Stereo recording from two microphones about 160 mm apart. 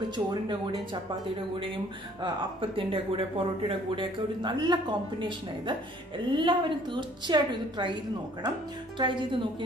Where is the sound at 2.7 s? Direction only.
35° right (ahead or behind).